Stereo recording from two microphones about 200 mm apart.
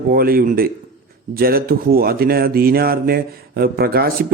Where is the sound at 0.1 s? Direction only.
50° right (ahead or behind).